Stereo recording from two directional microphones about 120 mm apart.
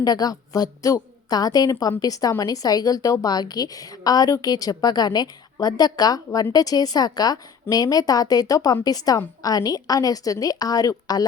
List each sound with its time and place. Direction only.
0.0 s a woman's voice: 30° left (ahead or behind)